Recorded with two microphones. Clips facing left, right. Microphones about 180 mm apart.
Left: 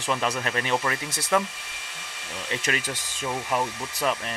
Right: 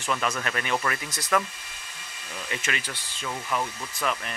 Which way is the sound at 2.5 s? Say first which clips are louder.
Left 4 dB; 35° left (ahead or behind).